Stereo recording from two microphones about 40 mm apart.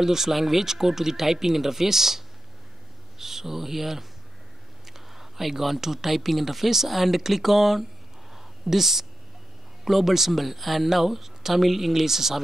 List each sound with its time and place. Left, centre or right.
0.0 s speech: centre